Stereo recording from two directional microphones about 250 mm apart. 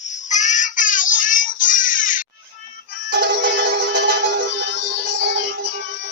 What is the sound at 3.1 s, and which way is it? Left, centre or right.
Music, right.